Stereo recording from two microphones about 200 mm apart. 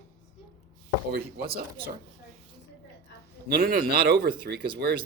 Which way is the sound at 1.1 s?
50° right (ahead or behind).